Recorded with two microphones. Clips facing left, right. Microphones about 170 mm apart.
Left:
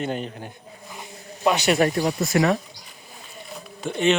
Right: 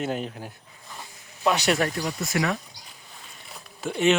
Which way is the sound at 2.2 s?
35° left (ahead or behind).